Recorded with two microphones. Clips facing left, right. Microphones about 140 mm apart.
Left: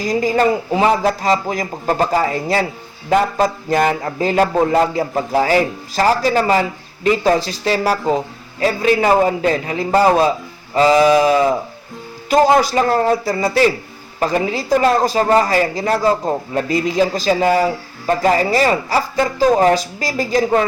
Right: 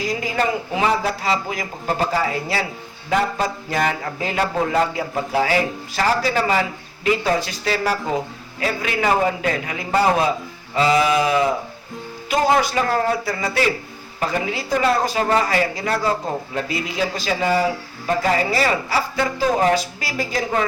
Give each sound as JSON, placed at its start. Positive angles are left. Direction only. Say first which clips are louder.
{"t": 0.0, "sound": "a man's voice", "louder": "left 6 dB", "side_deg": 40}